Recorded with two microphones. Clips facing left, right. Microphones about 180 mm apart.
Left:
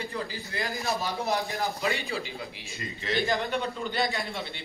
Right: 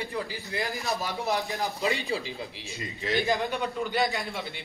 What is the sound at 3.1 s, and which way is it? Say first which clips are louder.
Speech: right 1 dB; 20° right (ahead or behind).